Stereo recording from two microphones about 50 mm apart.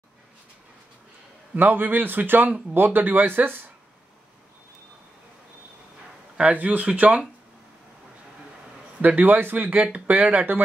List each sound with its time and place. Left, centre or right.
1.5 s speech: right
6.5 s speech: right
9.0 s speech: right